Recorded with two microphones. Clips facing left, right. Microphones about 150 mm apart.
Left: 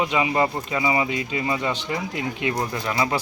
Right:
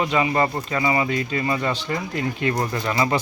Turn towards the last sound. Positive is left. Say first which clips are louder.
# right 2 dB
turn(degrees=5)  # may be behind; listen again after turning